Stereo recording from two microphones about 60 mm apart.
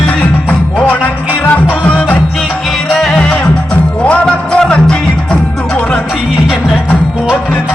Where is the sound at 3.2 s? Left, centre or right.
Centre.